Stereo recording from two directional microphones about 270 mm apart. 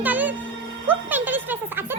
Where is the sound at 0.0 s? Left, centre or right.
Centre.